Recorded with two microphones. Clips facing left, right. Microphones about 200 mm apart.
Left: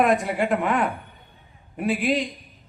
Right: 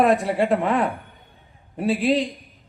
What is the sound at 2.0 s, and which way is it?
Speech, 30° right (ahead or behind).